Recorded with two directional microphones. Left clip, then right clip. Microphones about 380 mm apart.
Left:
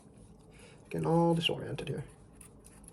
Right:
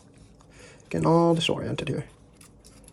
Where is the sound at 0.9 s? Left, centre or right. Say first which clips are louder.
Right 8 dB; centre.